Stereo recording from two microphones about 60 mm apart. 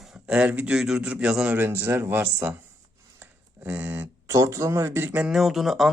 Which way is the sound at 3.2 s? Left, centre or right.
Right.